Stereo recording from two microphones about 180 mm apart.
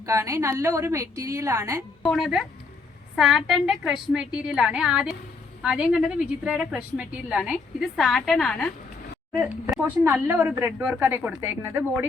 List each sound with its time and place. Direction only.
0.0 s a woman's voice: 15° right (ahead or behind)
2.0 s a woman's voice: centre (ahead or behind)
9.3 s a woman's voice: 10° right (ahead or behind)